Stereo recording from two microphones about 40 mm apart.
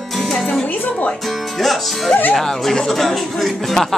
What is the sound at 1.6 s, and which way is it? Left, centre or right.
Speech, centre.